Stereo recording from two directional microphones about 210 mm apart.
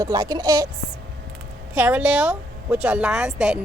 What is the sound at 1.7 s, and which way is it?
Speech, 10° right (ahead or behind).